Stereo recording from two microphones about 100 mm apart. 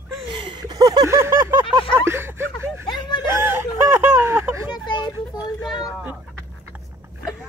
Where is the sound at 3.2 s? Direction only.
25° right (ahead or behind).